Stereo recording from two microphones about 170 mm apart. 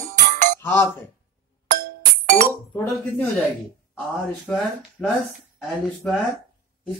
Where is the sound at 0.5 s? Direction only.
15° left (ahead or behind).